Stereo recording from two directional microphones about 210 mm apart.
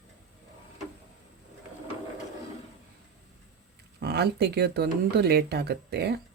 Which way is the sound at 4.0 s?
50° right (ahead or behind).